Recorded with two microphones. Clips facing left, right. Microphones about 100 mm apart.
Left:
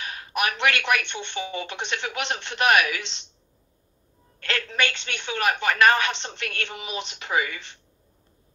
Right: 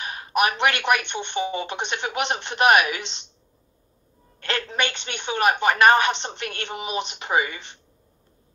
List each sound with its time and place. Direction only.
0.0 s a woman's voice: 20° right (ahead or behind)
4.4 s a woman's voice: 20° right (ahead or behind)